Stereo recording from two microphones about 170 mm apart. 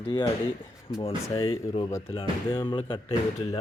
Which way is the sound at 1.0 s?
30° left (ahead or behind).